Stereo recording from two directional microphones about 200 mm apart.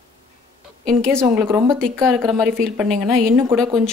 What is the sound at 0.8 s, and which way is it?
Speech, 5° left (ahead or behind).